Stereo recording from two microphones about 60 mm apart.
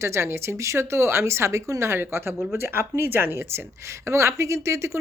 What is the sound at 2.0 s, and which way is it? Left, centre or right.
A woman's voice, right.